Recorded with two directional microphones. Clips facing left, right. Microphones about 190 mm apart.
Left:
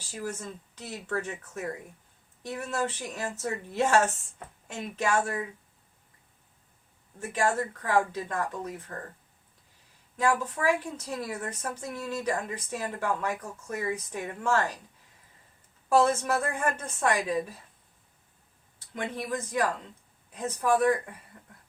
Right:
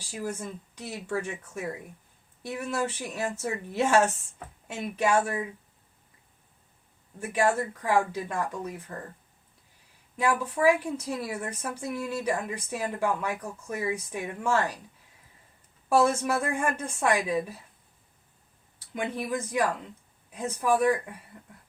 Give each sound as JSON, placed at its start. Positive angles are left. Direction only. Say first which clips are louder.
{"t": 0.1, "sound": "a woman's voice", "louder": "right 2 dB", "side_deg": -15}
{"t": 7.2, "sound": "a woman's voice", "louder": "right 2 dB", "side_deg": -10}
{"t": 10.2, "sound": "a woman's voice", "louder": "right 1 dB", "side_deg": -10}
{"t": 16.2, "sound": "a woman's voice", "louder": "right 1 dB", "side_deg": -10}
{"t": 18.9, "sound": "a woman's voice", "louder": "right 2 dB", "side_deg": -10}